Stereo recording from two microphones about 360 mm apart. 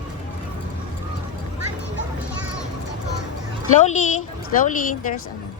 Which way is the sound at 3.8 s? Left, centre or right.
Centre.